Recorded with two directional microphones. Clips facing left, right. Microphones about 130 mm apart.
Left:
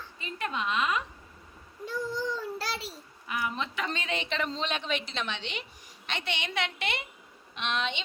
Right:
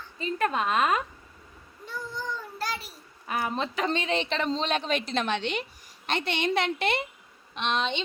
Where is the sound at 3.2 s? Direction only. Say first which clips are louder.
Right 4 dB; 40° right (ahead or behind).